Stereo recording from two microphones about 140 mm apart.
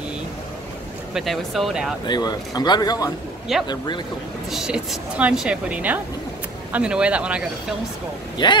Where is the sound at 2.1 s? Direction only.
30° left (ahead or behind).